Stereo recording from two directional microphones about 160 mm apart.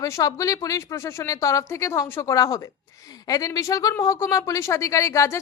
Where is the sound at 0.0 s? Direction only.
20° left (ahead or behind).